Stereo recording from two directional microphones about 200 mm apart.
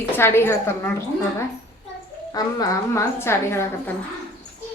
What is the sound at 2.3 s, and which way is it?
A woman's voice, 15° left (ahead or behind).